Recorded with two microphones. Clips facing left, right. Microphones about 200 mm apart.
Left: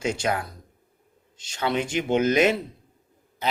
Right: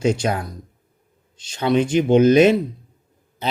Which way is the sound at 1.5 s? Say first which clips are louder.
Right 8 dB; 20° right (ahead or behind).